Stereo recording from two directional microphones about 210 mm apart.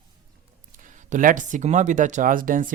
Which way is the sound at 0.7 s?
40° right (ahead or behind).